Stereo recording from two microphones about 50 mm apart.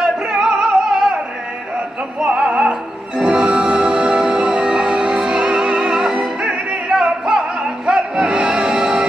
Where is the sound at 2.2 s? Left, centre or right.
Centre.